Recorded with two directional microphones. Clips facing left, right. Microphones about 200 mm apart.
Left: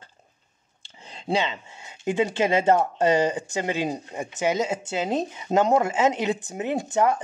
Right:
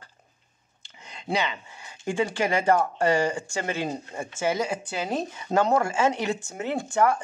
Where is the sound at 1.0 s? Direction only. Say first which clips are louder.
Left 2 dB; 30° left (ahead or behind).